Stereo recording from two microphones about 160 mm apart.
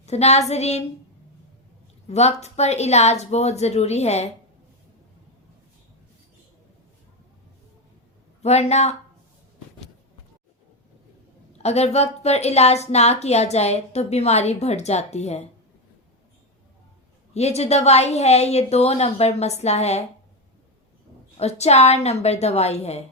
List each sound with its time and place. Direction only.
0.0 s a woman's voice: 45° left (ahead or behind)
2.0 s a woman's voice: 45° left (ahead or behind)
8.4 s a woman's voice: 40° left (ahead or behind)
11.5 s a woman's voice: 40° left (ahead or behind)
17.3 s a woman's voice: 40° left (ahead or behind)
21.3 s a woman's voice: 40° left (ahead or behind)